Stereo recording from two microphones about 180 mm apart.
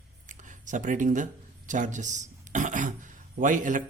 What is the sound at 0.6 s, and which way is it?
Speech, 45° right (ahead or behind).